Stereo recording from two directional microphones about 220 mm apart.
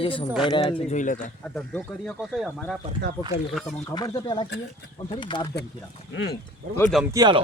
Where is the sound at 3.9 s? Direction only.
20° left (ahead or behind).